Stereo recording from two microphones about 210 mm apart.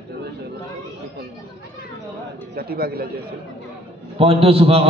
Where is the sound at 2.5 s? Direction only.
45° right (ahead or behind).